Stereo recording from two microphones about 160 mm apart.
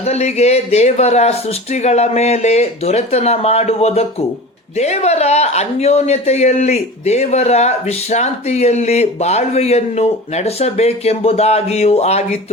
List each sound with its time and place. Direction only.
0.0 s speech: 45° left (ahead or behind)